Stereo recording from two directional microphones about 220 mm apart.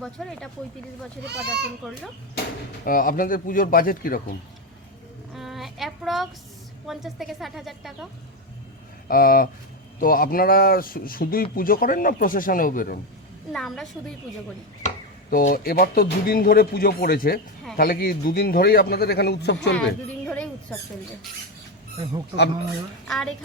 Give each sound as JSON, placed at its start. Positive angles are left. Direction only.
{"t": 0.0, "sound": "a woman's voice", "side_deg": 0}
{"t": 2.8, "sound": "speech", "side_deg": 40}
{"t": 5.3, "sound": "child singing", "side_deg": 0}
{"t": 6.8, "sound": "a woman's voice", "side_deg": 0}
{"t": 9.0, "sound": "speech", "side_deg": 40}
{"t": 13.5, "sound": "a woman's voice", "side_deg": 0}
{"t": 14.8, "sound": "speech", "side_deg": 40}
{"t": 20.2, "sound": "a sound", "side_deg": 5}
{"t": 23.0, "sound": "a woman's voice", "side_deg": 0}